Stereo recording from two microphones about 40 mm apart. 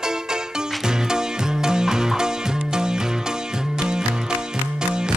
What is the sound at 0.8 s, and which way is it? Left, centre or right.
Music, centre.